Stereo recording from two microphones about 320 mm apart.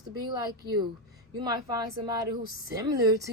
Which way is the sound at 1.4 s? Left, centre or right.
Centre.